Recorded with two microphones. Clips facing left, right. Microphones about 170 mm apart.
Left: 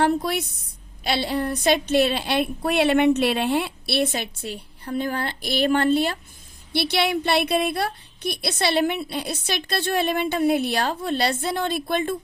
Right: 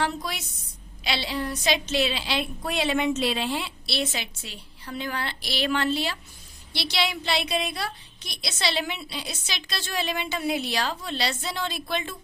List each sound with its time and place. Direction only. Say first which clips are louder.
0.0 s a woman's voice: left 8 dB; 55° left (ahead or behind)